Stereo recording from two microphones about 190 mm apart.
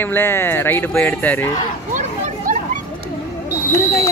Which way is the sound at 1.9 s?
45° right (ahead or behind).